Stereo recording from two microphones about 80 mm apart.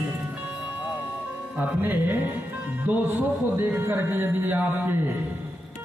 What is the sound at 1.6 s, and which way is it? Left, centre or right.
A man's voice, right.